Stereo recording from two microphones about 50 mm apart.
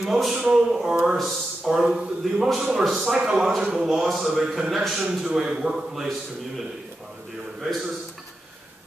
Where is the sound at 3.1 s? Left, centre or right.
Centre.